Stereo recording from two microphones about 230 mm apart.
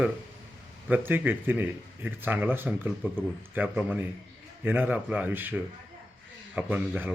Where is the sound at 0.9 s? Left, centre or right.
Centre.